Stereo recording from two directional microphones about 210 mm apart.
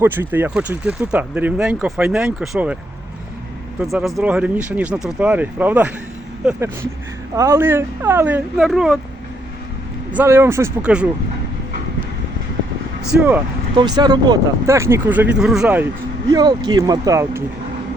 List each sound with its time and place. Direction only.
0.0 s speech: 10° right (ahead or behind)
3.8 s speech: centre (ahead or behind)
10.1 s speech: 10° right (ahead or behind)
13.7 s speech: 20° right (ahead or behind)
16.3 s speech: 20° right (ahead or behind)